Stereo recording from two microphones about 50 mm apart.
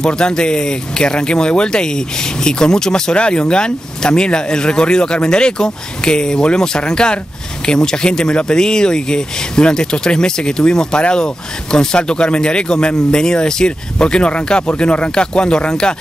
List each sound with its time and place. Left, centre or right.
0.0 s speech: centre